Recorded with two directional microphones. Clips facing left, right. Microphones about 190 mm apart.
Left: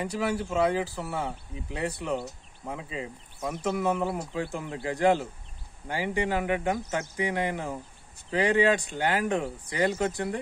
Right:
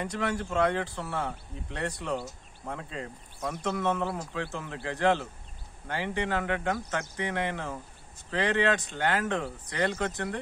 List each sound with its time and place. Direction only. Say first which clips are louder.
0.0 s speech: left 2 dB; 5° left (ahead or behind)